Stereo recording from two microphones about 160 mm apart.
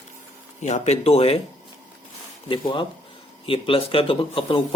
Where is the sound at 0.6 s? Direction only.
45° left (ahead or behind).